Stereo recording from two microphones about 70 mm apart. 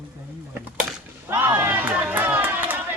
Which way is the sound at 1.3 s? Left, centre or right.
Right.